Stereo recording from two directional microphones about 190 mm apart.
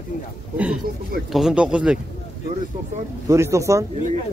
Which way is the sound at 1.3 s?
5° right (ahead or behind).